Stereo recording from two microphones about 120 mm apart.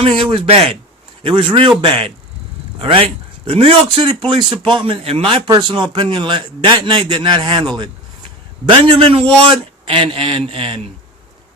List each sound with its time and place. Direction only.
0.0 s speech: 50° right (ahead or behind)
5.5 s a man's voice: 40° right (ahead or behind)